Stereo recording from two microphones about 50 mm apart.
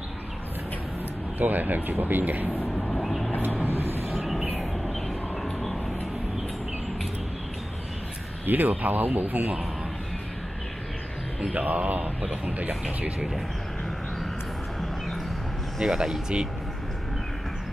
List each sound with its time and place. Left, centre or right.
1.4 s speech: right
2.7 s vehicle: centre
3.0 s vehicle: centre
3.6 s vehicle: right
4.3 s train: centre
5.0 s a sound: centre
8.5 s speech: right
11.5 s speech: right
15.8 s speech: centre